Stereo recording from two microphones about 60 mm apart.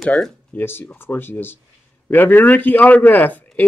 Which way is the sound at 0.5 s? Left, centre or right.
Left.